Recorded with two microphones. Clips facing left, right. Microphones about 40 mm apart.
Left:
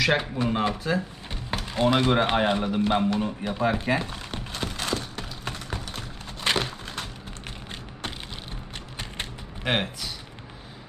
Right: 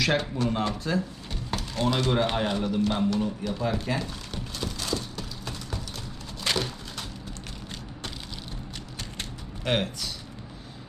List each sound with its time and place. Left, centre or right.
0.0 s speech: centre; by 5.8 s left
6.4 s a sound: left
9.6 s speech: centre